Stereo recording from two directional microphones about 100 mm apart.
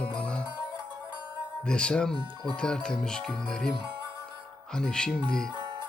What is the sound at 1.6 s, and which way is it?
Speech, 10° left (ahead or behind).